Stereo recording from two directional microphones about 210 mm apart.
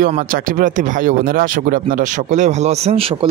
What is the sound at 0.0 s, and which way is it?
Speech, 40° right (ahead or behind).